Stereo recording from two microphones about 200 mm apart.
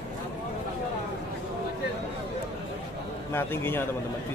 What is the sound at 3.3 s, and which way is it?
Speech, 10° left (ahead or behind).